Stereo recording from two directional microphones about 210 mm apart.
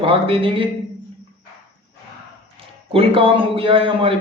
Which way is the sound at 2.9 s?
25° right (ahead or behind).